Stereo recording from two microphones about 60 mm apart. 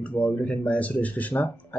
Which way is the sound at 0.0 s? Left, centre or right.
Left.